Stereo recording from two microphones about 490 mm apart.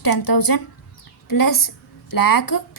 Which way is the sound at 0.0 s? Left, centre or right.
Left.